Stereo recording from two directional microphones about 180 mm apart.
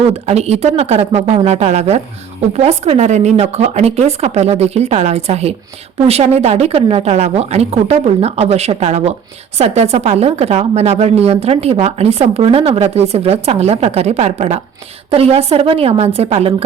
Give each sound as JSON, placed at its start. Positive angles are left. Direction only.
{"t": 0.1, "sound": "a woman's voice", "side_deg": -35}